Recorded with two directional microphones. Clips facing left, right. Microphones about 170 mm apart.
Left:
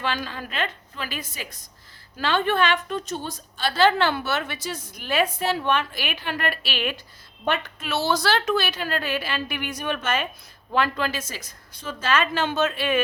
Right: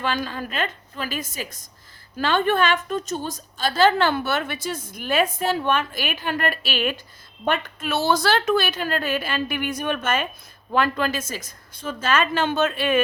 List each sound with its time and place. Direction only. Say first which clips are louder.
0.0 s a woman's voice: right 3 dB; 45° right (ahead or behind)